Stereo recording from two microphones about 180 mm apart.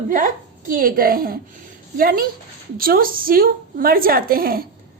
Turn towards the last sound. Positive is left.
turn(degrees=-55)  # may be behind; listen again after turning